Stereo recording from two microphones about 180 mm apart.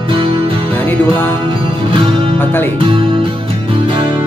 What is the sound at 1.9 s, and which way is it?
Music, 30° right (ahead or behind).